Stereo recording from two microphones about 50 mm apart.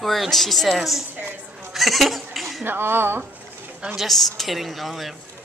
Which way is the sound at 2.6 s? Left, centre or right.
Right.